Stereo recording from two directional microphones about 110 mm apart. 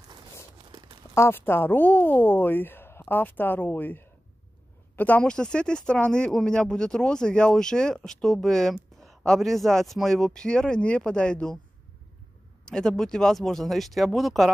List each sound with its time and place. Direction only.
0.7 s tearing: 45° right (ahead or behind)
1.1 s speech: 20° left (ahead or behind)
12.6 s speech: 5° left (ahead or behind)